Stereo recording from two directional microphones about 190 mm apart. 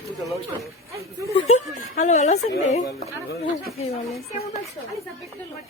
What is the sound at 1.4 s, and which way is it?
A woman's voice, 35° left (ahead or behind).